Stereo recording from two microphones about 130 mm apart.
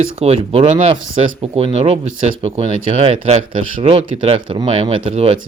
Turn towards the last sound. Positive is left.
turn(degrees=-50)  # may be behind; listen again after turning